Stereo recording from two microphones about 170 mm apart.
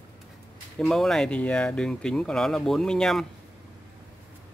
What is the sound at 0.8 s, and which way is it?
Speech, centre (ahead or behind).